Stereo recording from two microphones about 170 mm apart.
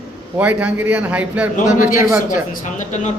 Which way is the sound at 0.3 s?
10° right (ahead or behind).